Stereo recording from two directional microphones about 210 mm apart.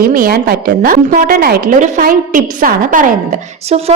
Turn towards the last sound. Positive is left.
turn(degrees=-40)  # may be behind; listen again after turning